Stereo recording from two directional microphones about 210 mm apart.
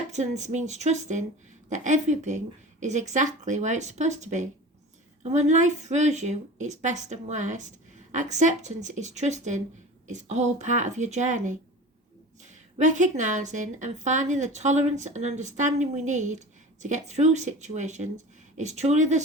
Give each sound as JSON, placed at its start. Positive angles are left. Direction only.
{"t": 0.1, "sound": "a woman's voice", "side_deg": -35}